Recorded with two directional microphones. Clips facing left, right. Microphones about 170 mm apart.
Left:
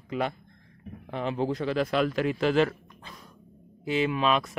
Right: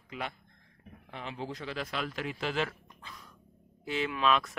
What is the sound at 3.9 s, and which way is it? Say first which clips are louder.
Speech: left 4 dB; 20° left (ahead or behind).